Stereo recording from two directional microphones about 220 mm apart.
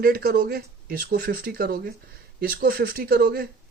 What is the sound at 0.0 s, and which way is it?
Speech, 40° right (ahead or behind).